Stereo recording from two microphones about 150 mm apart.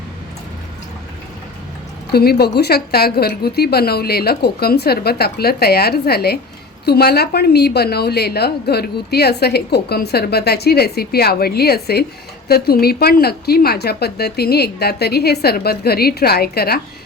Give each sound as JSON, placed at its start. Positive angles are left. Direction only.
{"t": 2.1, "sound": "a woman's voice", "side_deg": 90}